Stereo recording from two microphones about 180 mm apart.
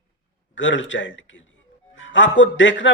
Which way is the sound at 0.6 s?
90° left.